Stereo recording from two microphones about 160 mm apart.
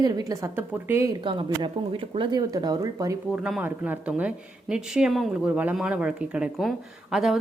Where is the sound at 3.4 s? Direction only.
5° right (ahead or behind).